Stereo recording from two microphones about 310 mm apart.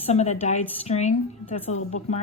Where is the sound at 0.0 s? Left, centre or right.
Left.